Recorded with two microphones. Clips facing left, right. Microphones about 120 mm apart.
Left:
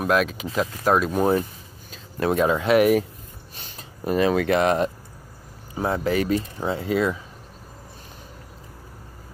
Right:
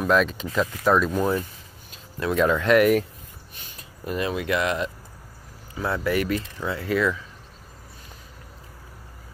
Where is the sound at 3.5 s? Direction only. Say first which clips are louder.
Left 4 dB; 30° left (ahead or behind).